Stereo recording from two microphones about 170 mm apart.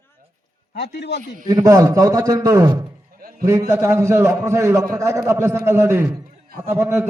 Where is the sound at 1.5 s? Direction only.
20° right (ahead or behind).